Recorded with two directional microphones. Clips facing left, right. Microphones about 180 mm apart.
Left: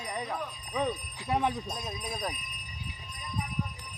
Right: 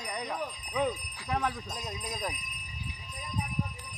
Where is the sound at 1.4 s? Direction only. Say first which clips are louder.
Left 3 dB; 25° left (ahead or behind).